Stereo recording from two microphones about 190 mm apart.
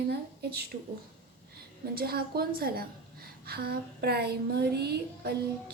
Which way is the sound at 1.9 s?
55° right (ahead or behind).